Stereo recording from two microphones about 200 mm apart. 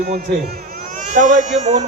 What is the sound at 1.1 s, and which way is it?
Speech, 40° right (ahead or behind).